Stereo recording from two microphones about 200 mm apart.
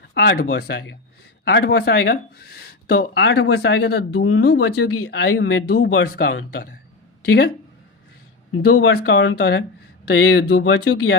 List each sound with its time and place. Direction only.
0.1 s speech: 55° left (ahead or behind)
4.2 s speech: 90° left; by 7.5 s 50° left (ahead or behind)
8.6 s speech: 55° left (ahead or behind); by 11.1 s 70° left (ahead or behind)